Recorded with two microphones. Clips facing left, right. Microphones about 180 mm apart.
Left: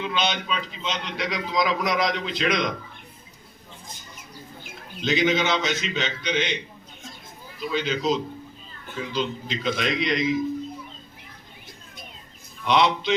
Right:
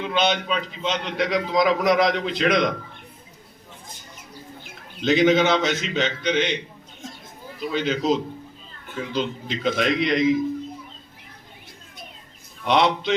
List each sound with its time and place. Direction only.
0.0 s a man's voice: 55° right (ahead or behind)
5.0 s a man's voice: 50° right (ahead or behind)
7.7 s a man's voice: 50° right (ahead or behind)
12.6 s a man's voice: 50° right (ahead or behind)